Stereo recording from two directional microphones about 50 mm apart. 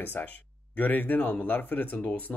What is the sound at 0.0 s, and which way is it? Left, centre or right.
Speech, left.